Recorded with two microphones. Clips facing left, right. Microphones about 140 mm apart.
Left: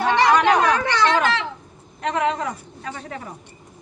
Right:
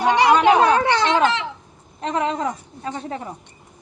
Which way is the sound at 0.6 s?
30° right (ahead or behind).